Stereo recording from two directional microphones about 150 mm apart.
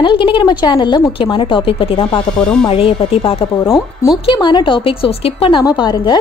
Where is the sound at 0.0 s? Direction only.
35° left (ahead or behind).